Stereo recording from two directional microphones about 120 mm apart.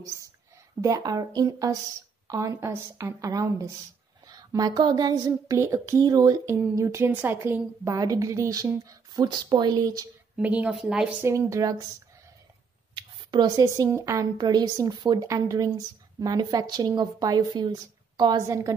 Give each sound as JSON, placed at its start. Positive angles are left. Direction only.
{"t": 0.7, "sound": "a woman's voice", "side_deg": -30}
{"t": 10.3, "sound": "a woman's voice", "side_deg": -10}
{"t": 11.1, "sound": "a woman's voice", "side_deg": -25}
{"t": 12.9, "sound": "a sound", "side_deg": -40}
{"t": 13.7, "sound": "a woman's voice", "side_deg": -25}